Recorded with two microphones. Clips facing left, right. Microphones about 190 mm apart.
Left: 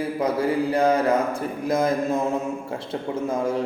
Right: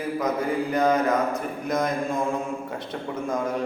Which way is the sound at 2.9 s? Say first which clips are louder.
Left 3 dB; 25° left (ahead or behind).